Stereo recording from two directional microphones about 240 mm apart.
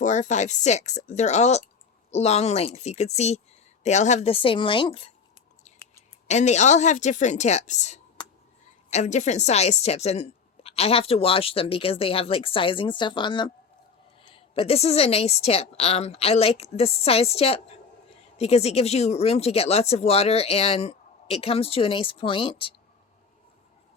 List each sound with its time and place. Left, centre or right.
0.0 s a woman's voice: left
6.2 s a woman's voice: left